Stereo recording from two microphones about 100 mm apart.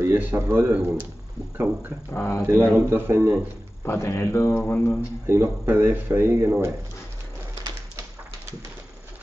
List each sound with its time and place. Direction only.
0.0 s speech: 20° right (ahead or behind)
2.1 s speech: 25° left (ahead or behind)
2.4 s speech: 20° right (ahead or behind)
3.8 s speech: 25° left (ahead or behind)
5.2 s speech: 25° right (ahead or behind)